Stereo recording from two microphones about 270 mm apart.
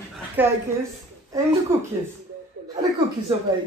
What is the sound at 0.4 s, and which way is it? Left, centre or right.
Speech, centre.